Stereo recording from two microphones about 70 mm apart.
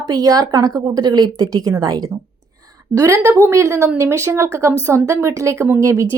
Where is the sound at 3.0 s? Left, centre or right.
Right.